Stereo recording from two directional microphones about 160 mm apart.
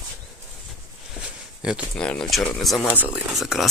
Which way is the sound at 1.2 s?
5° right (ahead or behind).